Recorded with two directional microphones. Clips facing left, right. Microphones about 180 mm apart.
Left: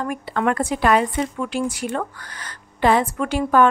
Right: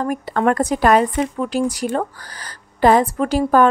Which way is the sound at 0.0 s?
40° right (ahead or behind).